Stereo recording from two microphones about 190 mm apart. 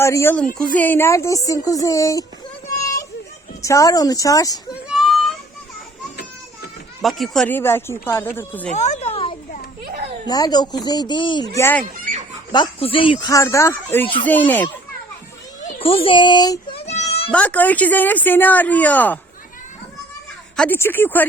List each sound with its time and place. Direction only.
0.0 s speech: 15° left (ahead or behind)
2.8 s a sound: 15° left (ahead or behind)
3.6 s speech: 15° left (ahead or behind)
4.9 s a sound: centre (ahead or behind)
7.0 s speech: centre (ahead or behind)
8.7 s a sound: 35° left (ahead or behind)
10.2 s speech: 20° left (ahead or behind)
12.5 s speech: 25° left (ahead or behind); by 14.7 s 10° left (ahead or behind)
15.6 s a child's voice: 30° left (ahead or behind)
16.8 s a sound: 35° left (ahead or behind)
17.3 s speech: 10° left (ahead or behind)
20.6 s speech: 10° left (ahead or behind)